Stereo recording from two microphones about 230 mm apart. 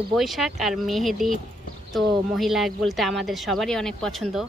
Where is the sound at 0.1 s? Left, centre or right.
Centre.